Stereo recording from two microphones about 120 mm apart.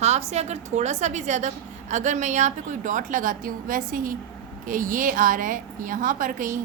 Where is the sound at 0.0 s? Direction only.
65° right (ahead or behind); by 3.3 s 90° right.